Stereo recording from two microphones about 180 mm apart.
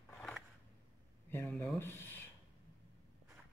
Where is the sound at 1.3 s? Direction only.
10° left (ahead or behind).